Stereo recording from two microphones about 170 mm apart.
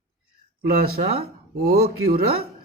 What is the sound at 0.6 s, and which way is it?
Speech, 65° right (ahead or behind).